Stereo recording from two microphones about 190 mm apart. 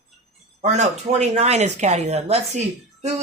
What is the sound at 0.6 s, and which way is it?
Speech, 35° right (ahead or behind).